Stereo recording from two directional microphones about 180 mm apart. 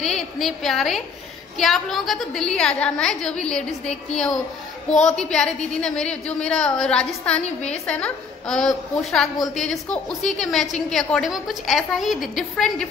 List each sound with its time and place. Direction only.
0.4 s a woman's voice: centre (ahead or behind)
7.4 s a woman's voice: 35° left (ahead or behind)
7.8 s a woman's voice: 5° left (ahead or behind)